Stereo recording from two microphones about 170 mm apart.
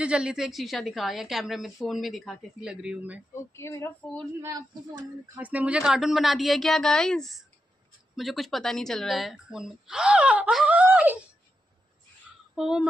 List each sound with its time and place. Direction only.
0.0 s a woman's voice: 5° right (ahead or behind)
3.5 s speech: 15° left (ahead or behind)
4.4 s speech: 20° right (ahead or behind)
5.4 s a woman's voice: 10° right (ahead or behind)
12.5 s speech: 5° right (ahead or behind)